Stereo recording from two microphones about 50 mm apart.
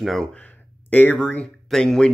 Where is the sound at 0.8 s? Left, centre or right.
Left.